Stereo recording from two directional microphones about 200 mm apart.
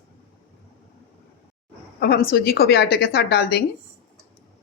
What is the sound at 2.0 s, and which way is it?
A woman's voice, 50° left (ahead or behind).